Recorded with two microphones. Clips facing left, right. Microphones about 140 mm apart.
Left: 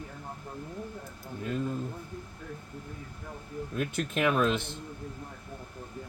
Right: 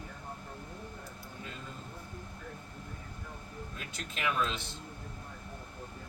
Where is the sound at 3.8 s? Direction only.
55° left (ahead or behind).